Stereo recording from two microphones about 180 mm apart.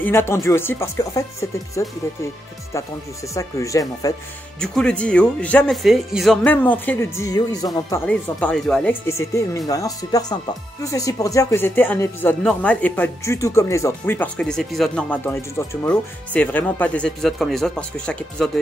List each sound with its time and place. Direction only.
0.0 s speech: 15° left (ahead or behind)
3.3 s speech: 15° left (ahead or behind)
4.6 s speech: 5° left (ahead or behind); by 8.0 s 20° left (ahead or behind)
8.1 s speech: 5° left (ahead or behind)